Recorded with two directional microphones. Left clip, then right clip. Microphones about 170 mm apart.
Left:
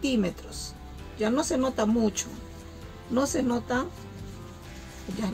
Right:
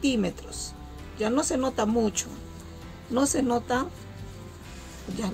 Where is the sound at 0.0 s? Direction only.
35° right (ahead or behind).